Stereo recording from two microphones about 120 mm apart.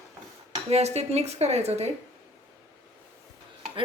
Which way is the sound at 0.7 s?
65° right (ahead or behind).